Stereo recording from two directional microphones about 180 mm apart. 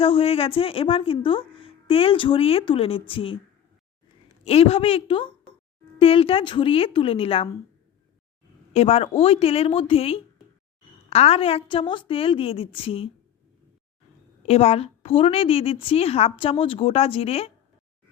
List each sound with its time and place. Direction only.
0.0 s speech: 30° left (ahead or behind)
4.4 s a woman's voice: 30° left (ahead or behind)
8.7 s speech: 35° left (ahead or behind)
14.4 s speech: 35° left (ahead or behind)